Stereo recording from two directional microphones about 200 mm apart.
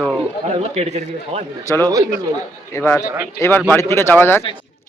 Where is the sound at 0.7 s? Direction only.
35° right (ahead or behind).